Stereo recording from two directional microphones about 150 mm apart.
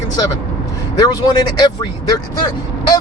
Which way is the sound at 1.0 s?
30° left (ahead or behind).